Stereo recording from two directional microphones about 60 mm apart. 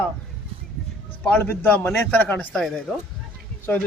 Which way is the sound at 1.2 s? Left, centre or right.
Left.